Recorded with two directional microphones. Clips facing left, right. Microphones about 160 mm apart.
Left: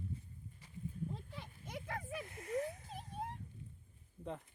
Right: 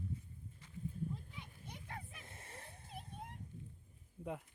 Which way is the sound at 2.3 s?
30° right (ahead or behind).